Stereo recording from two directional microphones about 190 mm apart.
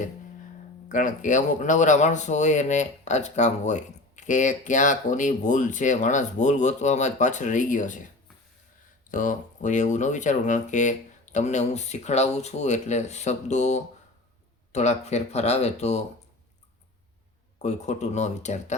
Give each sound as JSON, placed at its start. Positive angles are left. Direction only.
{"t": 0.9, "sound": "speech", "side_deg": 45}
{"t": 9.0, "sound": "speech", "side_deg": 45}
{"t": 17.6, "sound": "speech", "side_deg": 35}